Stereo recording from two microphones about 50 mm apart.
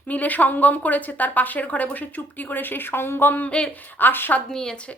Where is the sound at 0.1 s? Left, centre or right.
Left.